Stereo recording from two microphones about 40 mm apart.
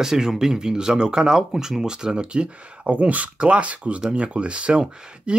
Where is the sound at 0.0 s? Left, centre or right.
Centre.